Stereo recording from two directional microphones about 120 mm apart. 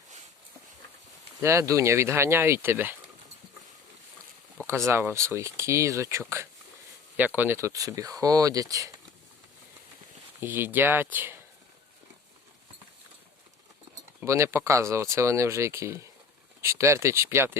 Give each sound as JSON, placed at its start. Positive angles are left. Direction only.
{"t": 1.4, "sound": "speech", "side_deg": -25}
{"t": 4.6, "sound": "speech", "side_deg": -25}
{"t": 10.4, "sound": "speech", "side_deg": -15}
{"t": 14.3, "sound": "speech", "side_deg": -25}